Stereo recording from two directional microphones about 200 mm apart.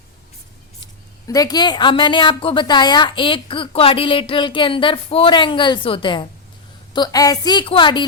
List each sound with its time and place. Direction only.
1.3 s a woman's voice: 20° left (ahead or behind)